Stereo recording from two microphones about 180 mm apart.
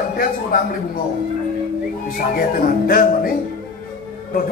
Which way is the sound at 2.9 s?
55° left (ahead or behind).